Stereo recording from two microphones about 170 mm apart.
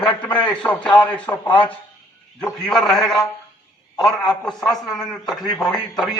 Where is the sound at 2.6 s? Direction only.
Centre (ahead or behind).